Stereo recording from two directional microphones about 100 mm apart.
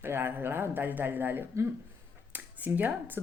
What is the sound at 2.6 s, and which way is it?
Speech, 15° right (ahead or behind).